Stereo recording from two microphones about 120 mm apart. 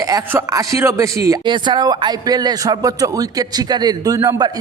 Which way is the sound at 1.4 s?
40° right (ahead or behind).